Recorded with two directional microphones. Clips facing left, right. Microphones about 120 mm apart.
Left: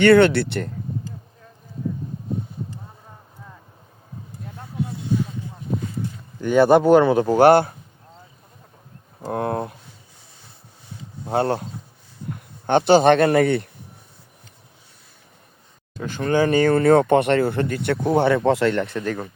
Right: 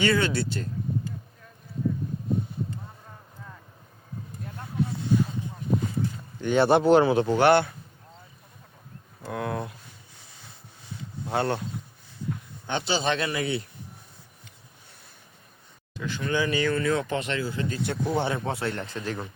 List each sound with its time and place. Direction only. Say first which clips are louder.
0.0 s speech: left 11 dB; 65° left (ahead or behind)
6.4 s a man's voice: left 5 dB; 45° left (ahead or behind)
9.2 s speech: left 6 dB; 40° left (ahead or behind)
11.3 s speech: left 5 dB; 35° left (ahead or behind)
12.6 s speech: left 13 dB; 55° left (ahead or behind)
16.0 s speech: left 7 dB; 45° left (ahead or behind)